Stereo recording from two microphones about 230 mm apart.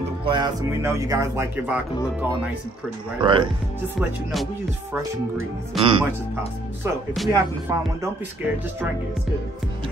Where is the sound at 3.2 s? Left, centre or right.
Right.